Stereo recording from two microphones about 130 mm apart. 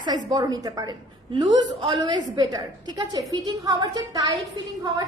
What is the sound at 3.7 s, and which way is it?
A woman's voice, 30° right (ahead or behind).